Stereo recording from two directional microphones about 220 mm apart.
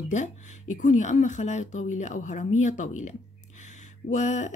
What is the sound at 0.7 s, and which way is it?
Speech, 35° left (ahead or behind).